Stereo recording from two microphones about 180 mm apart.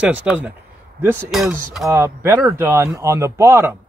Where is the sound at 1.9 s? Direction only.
15° right (ahead or behind).